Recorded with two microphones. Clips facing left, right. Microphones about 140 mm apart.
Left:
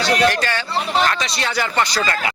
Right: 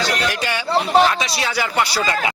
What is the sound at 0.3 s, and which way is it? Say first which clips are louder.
Speech: left 1 dB; 15° right (ahead or behind).